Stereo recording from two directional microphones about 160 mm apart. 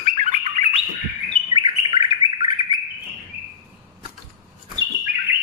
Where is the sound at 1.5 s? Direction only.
25° right (ahead or behind).